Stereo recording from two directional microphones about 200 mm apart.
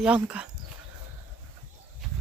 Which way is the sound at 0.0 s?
5° right (ahead or behind).